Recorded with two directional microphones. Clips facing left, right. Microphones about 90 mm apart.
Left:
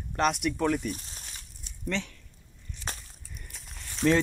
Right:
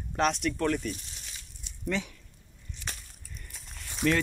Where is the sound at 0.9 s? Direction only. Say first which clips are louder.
Left 2 dB; 40° left (ahead or behind).